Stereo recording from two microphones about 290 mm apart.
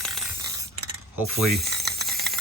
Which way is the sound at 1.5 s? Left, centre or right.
Right.